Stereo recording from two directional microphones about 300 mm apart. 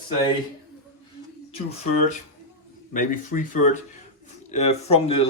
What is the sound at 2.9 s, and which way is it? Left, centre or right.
Speech, left.